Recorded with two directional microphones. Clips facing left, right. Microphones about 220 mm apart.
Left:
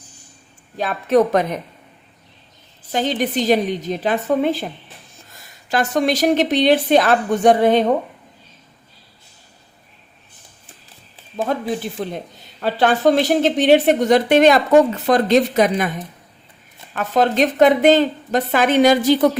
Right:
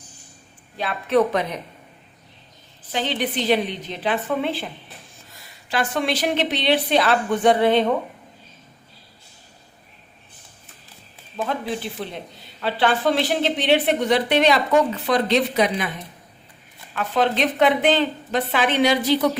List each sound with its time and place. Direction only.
0.8 s a woman's voice: 45° left (ahead or behind)
2.9 s a woman's voice: 45° left (ahead or behind)
11.4 s a woman's voice: 45° left (ahead or behind)